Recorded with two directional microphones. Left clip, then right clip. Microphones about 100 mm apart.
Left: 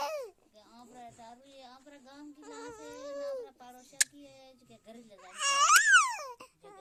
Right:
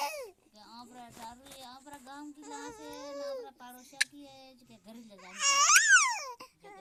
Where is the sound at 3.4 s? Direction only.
30° right (ahead or behind).